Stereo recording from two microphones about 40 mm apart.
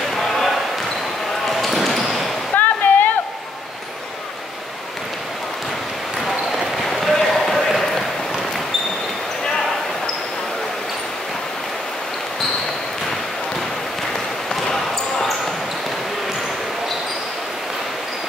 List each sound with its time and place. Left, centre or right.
1.5 s basketball bounce: centre
2.5 s waterfall: left
6.2 s basketball bounce: centre
7.2 s a sound: centre
14.5 s basketball bounce: centre